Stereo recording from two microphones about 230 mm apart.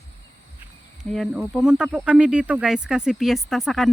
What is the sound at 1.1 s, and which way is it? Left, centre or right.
Speech, centre.